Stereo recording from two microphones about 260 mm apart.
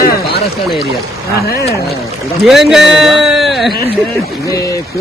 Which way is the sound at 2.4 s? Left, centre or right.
Centre.